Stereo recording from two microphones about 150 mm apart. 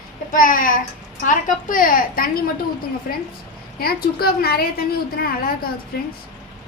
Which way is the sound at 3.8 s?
90° left.